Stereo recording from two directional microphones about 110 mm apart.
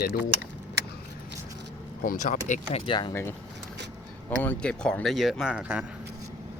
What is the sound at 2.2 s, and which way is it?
Speech, 90° left.